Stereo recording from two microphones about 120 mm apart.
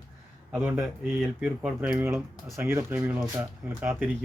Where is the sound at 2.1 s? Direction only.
20° right (ahead or behind).